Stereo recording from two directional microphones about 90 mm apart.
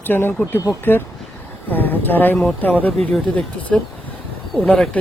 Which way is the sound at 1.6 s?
20° left (ahead or behind).